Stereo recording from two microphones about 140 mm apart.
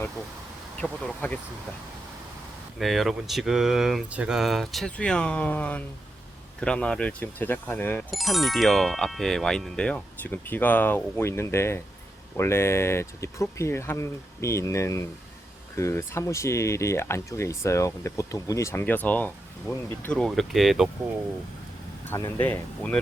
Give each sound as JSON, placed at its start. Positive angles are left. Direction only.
{"t": 0.8, "sound": "speech", "side_deg": 10}
{"t": 2.7, "sound": "speech", "side_deg": 0}
{"t": 8.1, "sound": "speech", "side_deg": 0}
{"t": 22.1, "sound": "speech", "side_deg": 15}